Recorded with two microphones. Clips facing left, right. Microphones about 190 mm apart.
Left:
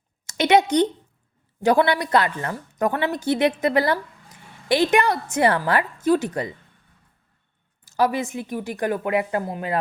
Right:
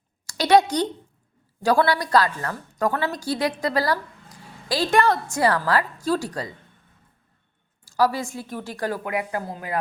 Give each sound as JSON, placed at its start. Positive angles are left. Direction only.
{"t": 0.3, "sound": "a sound", "side_deg": 20}
{"t": 1.6, "sound": "a woman's voice", "side_deg": 20}
{"t": 7.9, "sound": "a woman's voice", "side_deg": 20}